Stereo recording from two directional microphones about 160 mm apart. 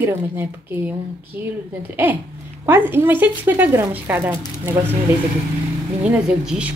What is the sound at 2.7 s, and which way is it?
Speech, 15° right (ahead or behind).